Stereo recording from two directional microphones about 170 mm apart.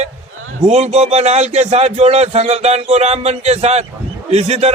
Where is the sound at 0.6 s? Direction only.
40° right (ahead or behind).